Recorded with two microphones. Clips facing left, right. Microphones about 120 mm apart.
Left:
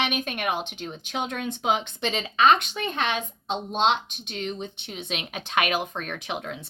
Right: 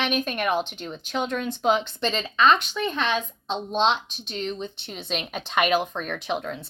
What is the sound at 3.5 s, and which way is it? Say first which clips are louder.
Speech: even; 50° left (ahead or behind).